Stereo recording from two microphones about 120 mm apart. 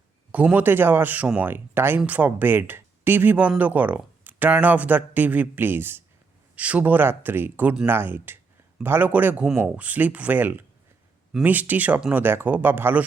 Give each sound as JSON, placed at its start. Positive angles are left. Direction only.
{"t": 0.3, "sound": "speech", "side_deg": -10}